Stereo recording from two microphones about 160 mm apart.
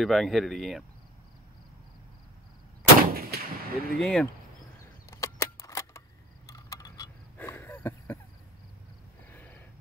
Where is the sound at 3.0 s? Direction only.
70° right (ahead or behind).